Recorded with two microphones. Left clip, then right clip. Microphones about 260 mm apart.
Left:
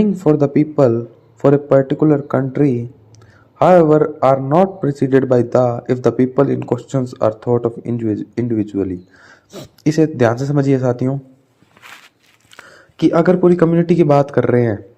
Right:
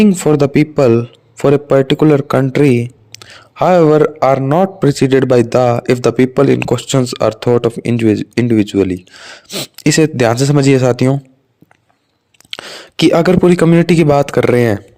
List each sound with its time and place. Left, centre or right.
0.0 s a man's voice: right
12.5 s a man's voice: right